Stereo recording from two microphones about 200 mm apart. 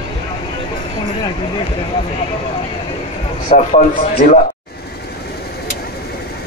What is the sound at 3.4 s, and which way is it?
Speech, 40° left (ahead or behind).